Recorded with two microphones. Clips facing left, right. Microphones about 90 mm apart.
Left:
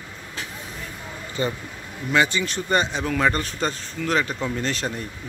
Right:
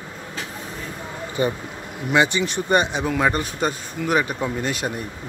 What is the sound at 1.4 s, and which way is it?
A man's voice, 15° right (ahead or behind).